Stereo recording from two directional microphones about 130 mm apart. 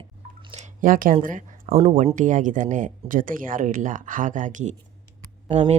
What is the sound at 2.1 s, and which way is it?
Speech, 75° right (ahead or behind).